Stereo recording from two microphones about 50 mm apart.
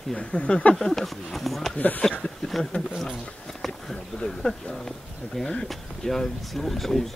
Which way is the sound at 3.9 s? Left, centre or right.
Centre.